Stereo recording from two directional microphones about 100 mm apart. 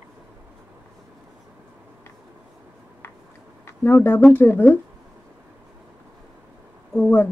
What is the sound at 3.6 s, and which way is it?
Speech, 20° left (ahead or behind).